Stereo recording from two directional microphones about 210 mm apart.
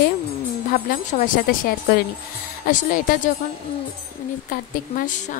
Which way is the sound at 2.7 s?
40° left (ahead or behind).